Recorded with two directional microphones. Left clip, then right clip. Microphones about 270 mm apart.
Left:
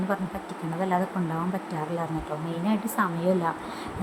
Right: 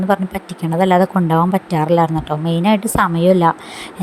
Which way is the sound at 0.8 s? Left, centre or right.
Right.